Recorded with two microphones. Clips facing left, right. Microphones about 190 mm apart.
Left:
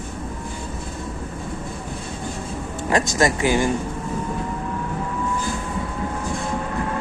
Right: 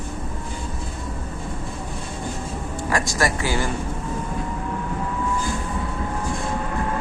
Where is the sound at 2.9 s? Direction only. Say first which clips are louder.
Left 4 dB; 20° left (ahead or behind).